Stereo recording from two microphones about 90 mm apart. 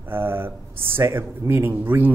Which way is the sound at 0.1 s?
25° right (ahead or behind).